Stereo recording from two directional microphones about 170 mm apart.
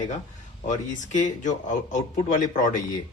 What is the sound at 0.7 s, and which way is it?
Speech, 45° left (ahead or behind).